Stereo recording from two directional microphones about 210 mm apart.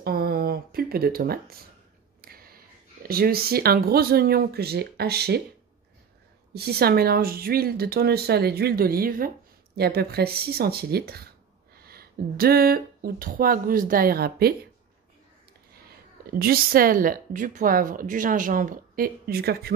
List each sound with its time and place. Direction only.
0.0 s speech: 45° right (ahead or behind)
2.2 s a sound: 45° right (ahead or behind)
3.0 s speech: 45° right (ahead or behind)
6.5 s speech: 50° right (ahead or behind)
16.3 s speech: 45° right (ahead or behind)